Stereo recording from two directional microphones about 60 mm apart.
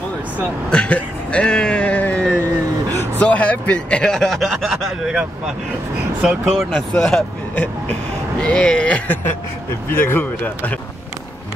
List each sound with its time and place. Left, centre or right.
0.7 s vehicle: centre
3.2 s speech: left; by 4.5 s centre
4.6 s speech: centre
6.4 s speech: centre; by 9.2 s left
9.8 s speech: left